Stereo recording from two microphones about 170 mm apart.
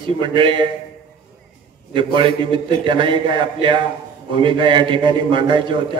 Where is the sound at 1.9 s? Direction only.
30° right (ahead or behind).